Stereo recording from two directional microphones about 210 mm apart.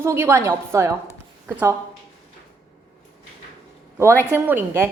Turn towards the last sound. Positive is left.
turn(degrees=-10)  # may be behind; listen again after turning